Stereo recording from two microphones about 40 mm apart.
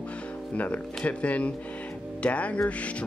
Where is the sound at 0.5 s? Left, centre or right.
Left.